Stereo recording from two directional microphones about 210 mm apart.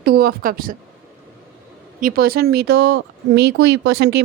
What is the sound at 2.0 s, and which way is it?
Speech, 45° right (ahead or behind).